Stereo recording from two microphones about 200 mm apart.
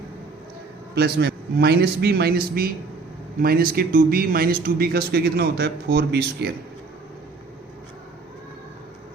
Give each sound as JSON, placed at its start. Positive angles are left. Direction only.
{"t": 0.9, "sound": "speech", "side_deg": -50}
{"t": 3.4, "sound": "speech", "side_deg": -50}